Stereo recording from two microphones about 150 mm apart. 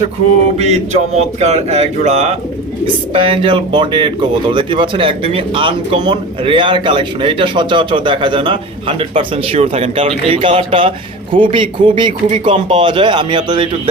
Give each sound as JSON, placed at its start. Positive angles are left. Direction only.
{"t": 0.5, "sound": "speech", "side_deg": -45}